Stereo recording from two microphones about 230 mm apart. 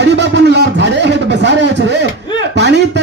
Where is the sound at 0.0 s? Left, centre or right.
Right.